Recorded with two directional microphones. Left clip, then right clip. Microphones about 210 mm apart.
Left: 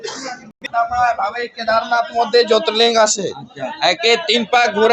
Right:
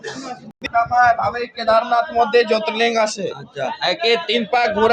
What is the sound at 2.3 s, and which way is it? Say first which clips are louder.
Speech: left 3 dB; 20° left (ahead or behind).